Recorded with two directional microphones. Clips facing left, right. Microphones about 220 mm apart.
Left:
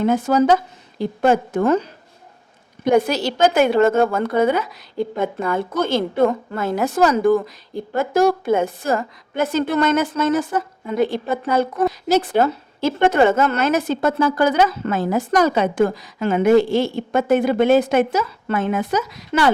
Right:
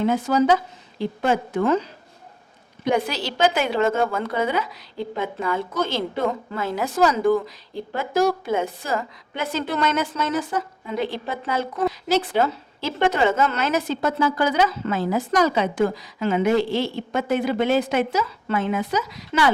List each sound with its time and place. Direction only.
0.0 s a woman's voice: 50° left (ahead or behind)
2.9 s a woman's voice: 45° left (ahead or behind)